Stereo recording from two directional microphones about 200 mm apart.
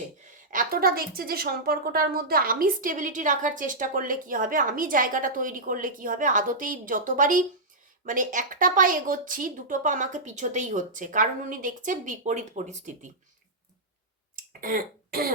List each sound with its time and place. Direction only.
0.3 s a woman's voice: 45° right (ahead or behind)
14.3 s cough: 45° right (ahead or behind)